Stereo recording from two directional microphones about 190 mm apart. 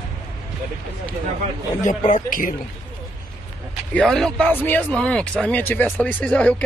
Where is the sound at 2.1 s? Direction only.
45° left (ahead or behind).